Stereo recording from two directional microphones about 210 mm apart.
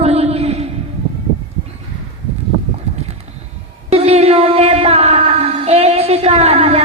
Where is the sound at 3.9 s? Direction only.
30° right (ahead or behind).